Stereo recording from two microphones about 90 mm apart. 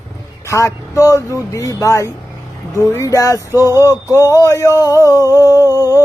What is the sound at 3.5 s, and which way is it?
Male singing, 30° right (ahead or behind).